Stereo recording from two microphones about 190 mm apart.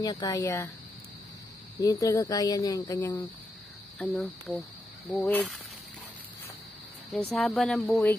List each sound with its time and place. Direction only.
0.0 s speech: 20° left (ahead or behind)
1.8 s speech: 20° left (ahead or behind)
4.0 s speech: centre (ahead or behind)
7.3 s speech: centre (ahead or behind)